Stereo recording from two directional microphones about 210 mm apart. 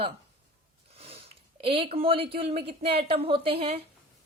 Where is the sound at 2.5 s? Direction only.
25° right (ahead or behind).